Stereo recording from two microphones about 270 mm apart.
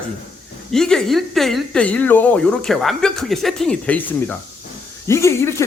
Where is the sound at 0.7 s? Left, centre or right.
Centre.